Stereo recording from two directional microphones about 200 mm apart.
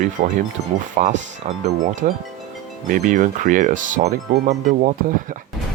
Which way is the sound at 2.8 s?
40° right (ahead or behind).